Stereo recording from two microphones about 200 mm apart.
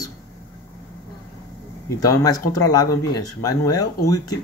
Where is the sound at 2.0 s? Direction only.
20° left (ahead or behind).